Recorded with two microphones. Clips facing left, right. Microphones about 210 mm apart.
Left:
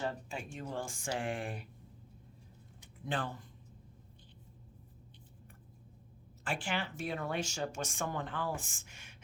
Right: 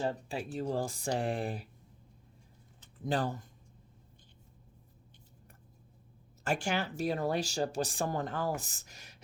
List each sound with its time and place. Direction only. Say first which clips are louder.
0.0 s speech: right 4 dB; 30° right (ahead or behind)
3.0 s speech: right 5 dB; 40° right (ahead or behind)
6.4 s speech: right 5 dB; 45° right (ahead or behind)